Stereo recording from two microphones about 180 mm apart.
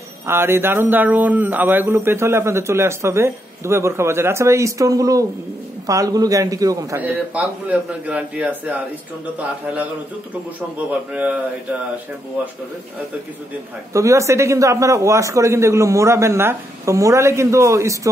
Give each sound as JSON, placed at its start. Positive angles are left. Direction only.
{"t": 0.3, "sound": "speech", "side_deg": -15}
{"t": 10.9, "sound": "speech", "side_deg": -10}
{"t": 13.9, "sound": "speech", "side_deg": -15}